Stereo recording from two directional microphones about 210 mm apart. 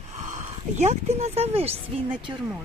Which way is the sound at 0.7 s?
30° right (ahead or behind).